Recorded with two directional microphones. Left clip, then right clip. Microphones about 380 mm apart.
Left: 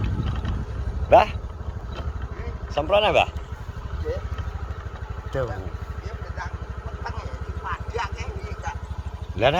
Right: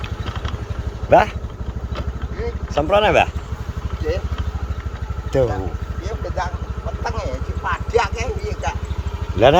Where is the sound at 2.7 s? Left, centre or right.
Centre.